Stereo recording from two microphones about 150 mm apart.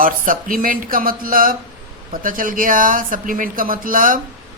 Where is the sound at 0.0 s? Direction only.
65° right (ahead or behind).